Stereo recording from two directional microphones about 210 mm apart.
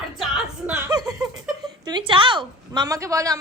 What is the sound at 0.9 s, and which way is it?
A woman's voice, 15° right (ahead or behind).